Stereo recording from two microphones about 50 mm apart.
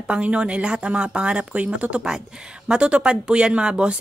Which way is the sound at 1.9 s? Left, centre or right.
Centre.